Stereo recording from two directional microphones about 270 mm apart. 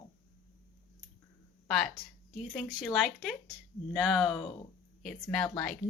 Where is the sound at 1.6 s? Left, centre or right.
Centre.